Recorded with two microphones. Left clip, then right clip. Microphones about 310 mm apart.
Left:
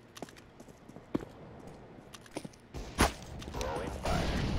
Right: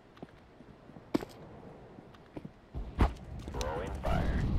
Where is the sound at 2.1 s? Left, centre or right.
Left.